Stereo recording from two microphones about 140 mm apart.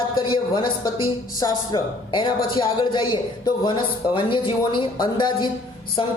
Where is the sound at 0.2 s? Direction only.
35° left (ahead or behind).